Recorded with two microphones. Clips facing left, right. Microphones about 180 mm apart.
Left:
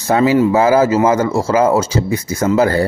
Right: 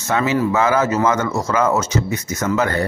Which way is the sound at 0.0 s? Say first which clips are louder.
Left 6 dB; 35° left (ahead or behind).